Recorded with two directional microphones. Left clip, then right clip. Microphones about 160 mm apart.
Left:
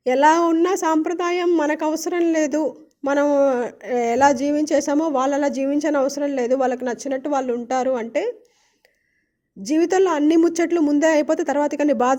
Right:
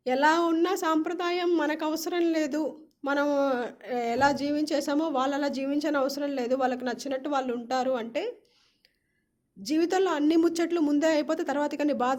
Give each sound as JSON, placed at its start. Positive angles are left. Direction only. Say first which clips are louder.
{"t": 0.0, "sound": "a woman's voice", "louder": "left 8 dB", "side_deg": 40}
{"t": 9.6, "sound": "a woman's voice", "louder": "left 8 dB", "side_deg": 35}